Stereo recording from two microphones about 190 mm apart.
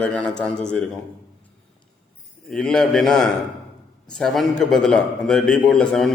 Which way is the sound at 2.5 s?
5° left (ahead or behind).